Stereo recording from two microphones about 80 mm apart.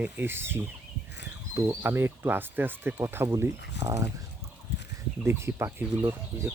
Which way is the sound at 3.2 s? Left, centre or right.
Right.